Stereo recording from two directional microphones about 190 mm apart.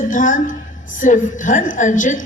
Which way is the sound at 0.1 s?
45° left (ahead or behind).